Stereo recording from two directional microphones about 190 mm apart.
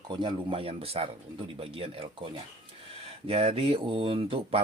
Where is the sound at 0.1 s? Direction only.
25° right (ahead or behind).